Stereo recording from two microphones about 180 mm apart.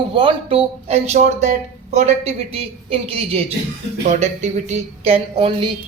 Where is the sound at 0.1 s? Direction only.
30° right (ahead or behind).